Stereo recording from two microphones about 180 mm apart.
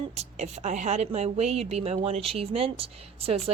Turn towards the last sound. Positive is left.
turn(degrees=-35)  # may be behind; listen again after turning